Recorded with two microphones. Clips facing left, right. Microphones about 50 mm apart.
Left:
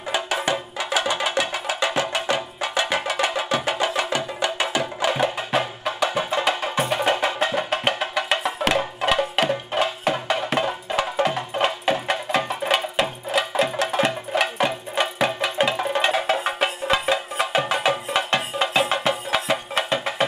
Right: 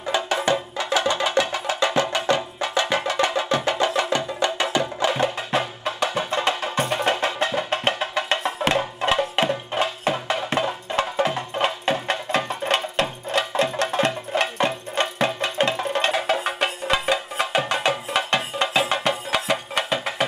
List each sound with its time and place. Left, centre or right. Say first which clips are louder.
0.4 s music: right 2 dB; centre
5.1 s music: left 1 dB; centre